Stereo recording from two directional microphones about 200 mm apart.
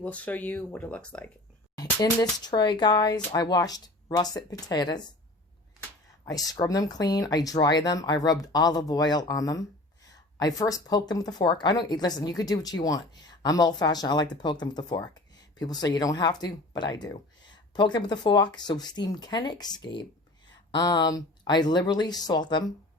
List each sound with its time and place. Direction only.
0.0 s speech: 5° left (ahead or behind)
1.7 s speech: 20° left (ahead or behind)
6.2 s speech: 20° left (ahead or behind)